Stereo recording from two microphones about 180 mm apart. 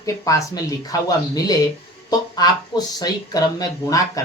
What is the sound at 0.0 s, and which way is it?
Speech, 20° left (ahead or behind).